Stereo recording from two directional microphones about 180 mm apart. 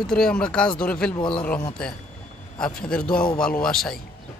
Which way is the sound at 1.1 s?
25° left (ahead or behind).